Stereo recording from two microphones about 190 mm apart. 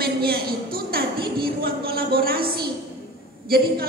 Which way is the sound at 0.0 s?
55° right (ahead or behind).